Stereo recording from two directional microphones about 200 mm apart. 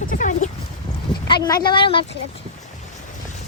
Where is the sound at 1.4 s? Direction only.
20° left (ahead or behind).